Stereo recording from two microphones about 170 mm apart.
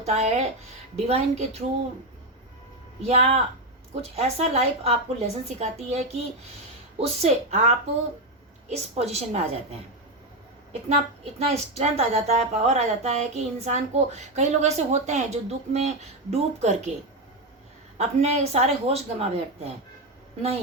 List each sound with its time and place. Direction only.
0.0 s speech: 40° right (ahead or behind)
3.0 s speech: 35° right (ahead or behind)
11.3 s speech: 40° right (ahead or behind)
17.9 s speech: 40° right (ahead or behind)